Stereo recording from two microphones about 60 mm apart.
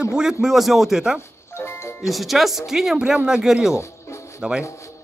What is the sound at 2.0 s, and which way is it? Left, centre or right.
A man's voice, centre.